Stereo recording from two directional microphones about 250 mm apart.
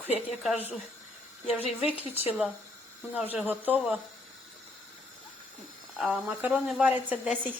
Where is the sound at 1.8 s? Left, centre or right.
Centre.